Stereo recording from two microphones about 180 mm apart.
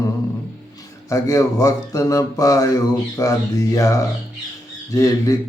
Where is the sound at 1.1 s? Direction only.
20° left (ahead or behind).